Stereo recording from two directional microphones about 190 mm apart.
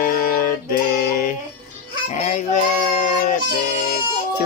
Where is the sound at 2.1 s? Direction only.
40° left (ahead or behind).